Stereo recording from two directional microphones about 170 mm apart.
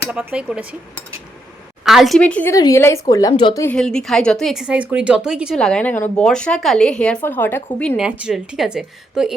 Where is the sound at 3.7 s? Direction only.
5° left (ahead or behind).